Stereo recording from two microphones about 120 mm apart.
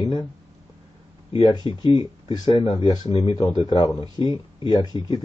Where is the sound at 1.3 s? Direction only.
40° left (ahead or behind).